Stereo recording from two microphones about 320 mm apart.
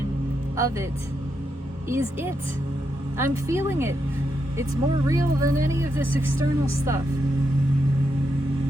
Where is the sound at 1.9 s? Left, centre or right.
Centre.